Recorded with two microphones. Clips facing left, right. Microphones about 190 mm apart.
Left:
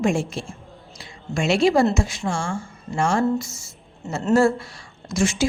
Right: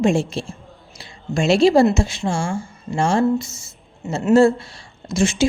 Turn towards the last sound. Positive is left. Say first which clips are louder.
# right 3 dB
turn(degrees=-25)  # may be behind; listen again after turning